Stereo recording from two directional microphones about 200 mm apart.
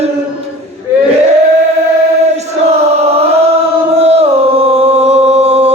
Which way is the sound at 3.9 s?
30° right (ahead or behind).